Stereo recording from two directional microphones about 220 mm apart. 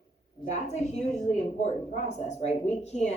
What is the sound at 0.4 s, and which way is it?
Speech, 30° left (ahead or behind).